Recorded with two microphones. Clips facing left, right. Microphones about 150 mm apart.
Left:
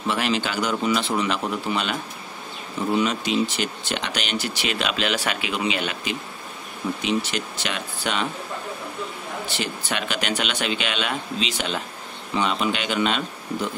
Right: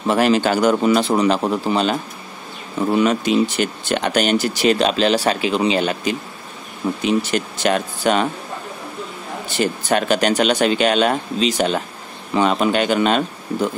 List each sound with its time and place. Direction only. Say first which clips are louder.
0.0 s speech: right 8 dB; 45° right (ahead or behind)
3.0 s speech: right 7 dB; 50° right (ahead or behind)
9.6 s speech: right 12 dB; 45° right (ahead or behind)